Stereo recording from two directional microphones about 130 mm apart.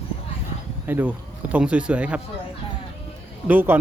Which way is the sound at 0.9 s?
15° right (ahead or behind).